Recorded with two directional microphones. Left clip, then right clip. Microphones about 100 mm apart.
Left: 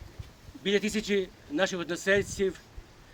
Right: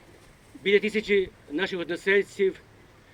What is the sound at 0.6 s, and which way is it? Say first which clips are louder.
Speech: right 6 dB; 45° left (ahead or behind).